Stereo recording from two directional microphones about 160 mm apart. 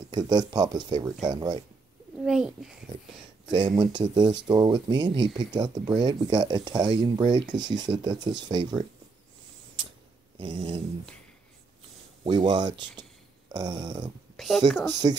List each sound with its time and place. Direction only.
0.1 s speech: 25° right (ahead or behind)
2.1 s a child's voice: 5° right (ahead or behind)
3.5 s speech: 25° right (ahead or behind)
10.4 s speech: 30° right (ahead or behind)
12.4 s speech: 30° right (ahead or behind)
14.3 s a sound: centre (ahead or behind)
15.0 s speech: 25° right (ahead or behind)